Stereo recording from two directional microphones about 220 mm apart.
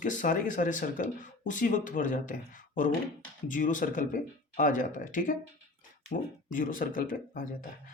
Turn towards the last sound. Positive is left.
turn(degrees=40)  # may be behind; listen again after turning